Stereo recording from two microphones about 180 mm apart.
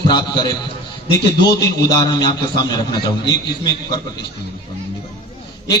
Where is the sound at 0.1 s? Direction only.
25° left (ahead or behind).